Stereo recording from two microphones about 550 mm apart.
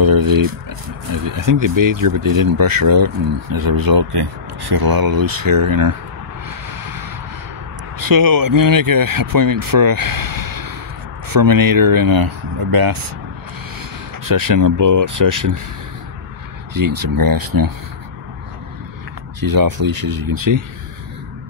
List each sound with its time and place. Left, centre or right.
0.0 s speech: right
6.7 s a sound: right
8.0 s speech: right
14.2 s speech: right
16.7 s speech: right
19.4 s speech: right